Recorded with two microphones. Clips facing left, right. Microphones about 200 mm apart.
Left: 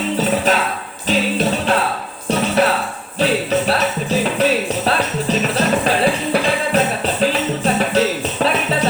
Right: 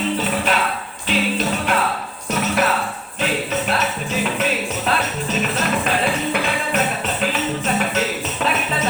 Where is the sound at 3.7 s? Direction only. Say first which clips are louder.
Left 4 dB; 35° left (ahead or behind).